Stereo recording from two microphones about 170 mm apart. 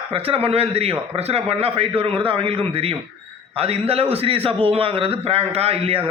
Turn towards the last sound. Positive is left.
turn(degrees=-35)  # may be behind; listen again after turning